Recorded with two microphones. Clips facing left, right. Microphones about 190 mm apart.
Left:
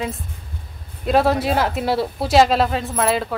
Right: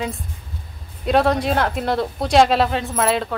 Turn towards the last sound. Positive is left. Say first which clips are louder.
# even
turn(degrees=0)  # may be behind; listen again after turning